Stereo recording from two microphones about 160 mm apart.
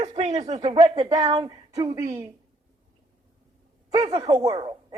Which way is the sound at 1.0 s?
25° right (ahead or behind).